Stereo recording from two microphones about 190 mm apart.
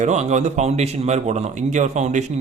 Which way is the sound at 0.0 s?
35° right (ahead or behind).